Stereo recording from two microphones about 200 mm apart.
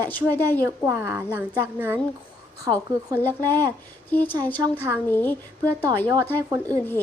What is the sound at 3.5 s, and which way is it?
Speech, 20° right (ahead or behind).